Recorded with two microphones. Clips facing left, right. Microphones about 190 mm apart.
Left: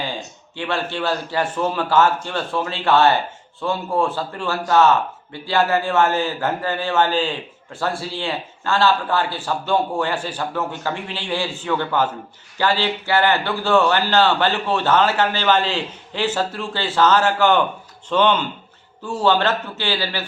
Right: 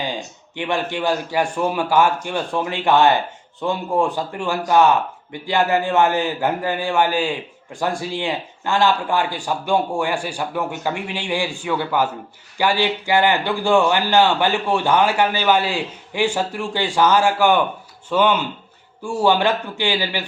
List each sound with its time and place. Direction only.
0.0 s a man's voice: 15° right (ahead or behind)